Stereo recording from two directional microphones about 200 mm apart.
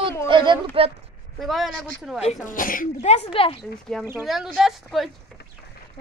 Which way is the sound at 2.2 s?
40° left (ahead or behind).